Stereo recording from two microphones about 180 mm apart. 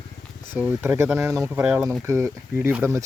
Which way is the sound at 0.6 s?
10° right (ahead or behind).